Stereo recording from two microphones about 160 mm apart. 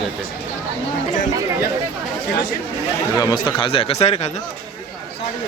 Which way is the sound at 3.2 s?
25° left (ahead or behind).